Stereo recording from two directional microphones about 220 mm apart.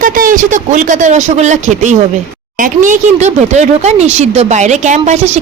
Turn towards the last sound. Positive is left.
turn(degrees=-30)  # may be behind; listen again after turning